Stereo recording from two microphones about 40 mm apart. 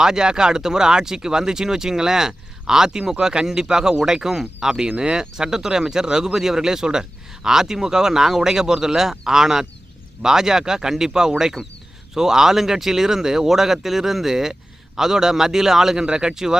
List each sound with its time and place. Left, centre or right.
0.0 s speech: centre
4.9 s speech: right